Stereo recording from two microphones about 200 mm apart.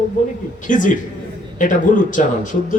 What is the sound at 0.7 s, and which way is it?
Speech, 40° left (ahead or behind).